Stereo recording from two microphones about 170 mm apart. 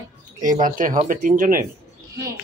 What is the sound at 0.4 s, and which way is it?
Speech, 50° right (ahead or behind).